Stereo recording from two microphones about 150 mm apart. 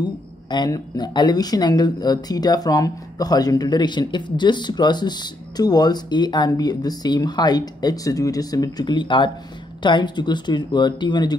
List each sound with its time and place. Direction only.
0.0 s speech: 30° left (ahead or behind)